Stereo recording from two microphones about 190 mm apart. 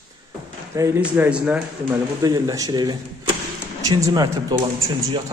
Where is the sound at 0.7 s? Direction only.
15° right (ahead or behind).